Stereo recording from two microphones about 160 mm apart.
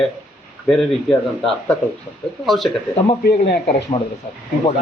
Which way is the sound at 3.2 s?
85° left.